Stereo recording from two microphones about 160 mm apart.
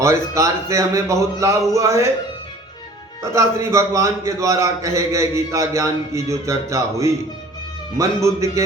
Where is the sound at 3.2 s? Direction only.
20° right (ahead or behind).